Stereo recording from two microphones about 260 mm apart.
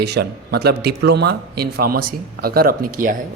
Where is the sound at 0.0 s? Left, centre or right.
Right.